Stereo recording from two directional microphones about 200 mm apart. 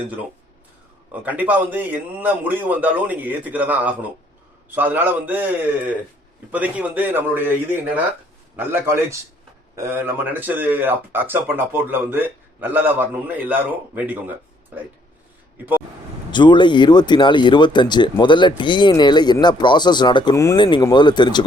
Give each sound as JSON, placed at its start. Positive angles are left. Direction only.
{"t": 0.0, "sound": "speech", "side_deg": -5}
{"t": 16.3, "sound": "speech", "side_deg": 25}